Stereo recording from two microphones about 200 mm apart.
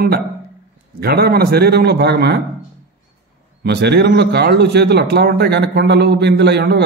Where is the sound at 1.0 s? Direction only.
50° right (ahead or behind).